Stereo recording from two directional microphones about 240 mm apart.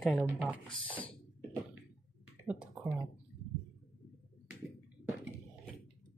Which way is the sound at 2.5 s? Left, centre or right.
Centre.